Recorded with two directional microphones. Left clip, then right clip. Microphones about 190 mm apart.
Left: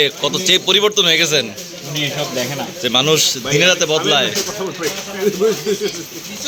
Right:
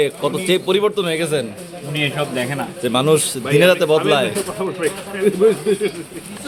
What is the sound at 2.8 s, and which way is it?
A man's voice, 15° right (ahead or behind).